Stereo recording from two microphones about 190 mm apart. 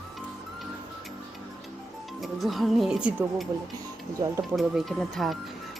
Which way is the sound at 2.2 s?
Centre (ahead or behind).